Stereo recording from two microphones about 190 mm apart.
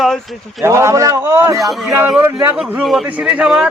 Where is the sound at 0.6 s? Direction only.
15° right (ahead or behind).